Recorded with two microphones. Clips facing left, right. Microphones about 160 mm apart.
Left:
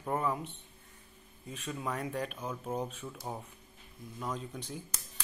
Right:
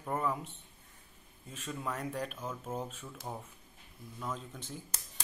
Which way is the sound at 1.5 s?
10° left (ahead or behind).